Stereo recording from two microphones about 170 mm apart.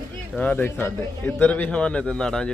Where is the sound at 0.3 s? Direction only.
10° left (ahead or behind).